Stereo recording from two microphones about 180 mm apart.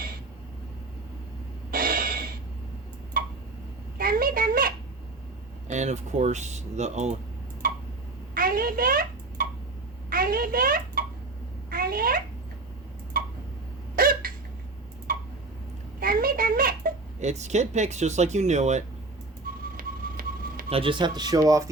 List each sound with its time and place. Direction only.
1.7 s a sound: 50° right (ahead or behind)
3.1 s tick-tock: 50° right (ahead or behind)
3.9 s a sound: 55° right (ahead or behind)
5.6 s speech: 40° right (ahead or behind)
7.6 s tick-tock: 50° right (ahead or behind)
8.4 s a sound: 50° right (ahead or behind)
13.2 s tick-tock: 50° right (ahead or behind)
13.9 s hiccup: 50° right (ahead or behind)
15.1 s tick-tock: 50° right (ahead or behind)
16.0 s a sound: 50° right (ahead or behind)
19.7 s music: 55° right (ahead or behind)
20.7 s speech: 30° right (ahead or behind)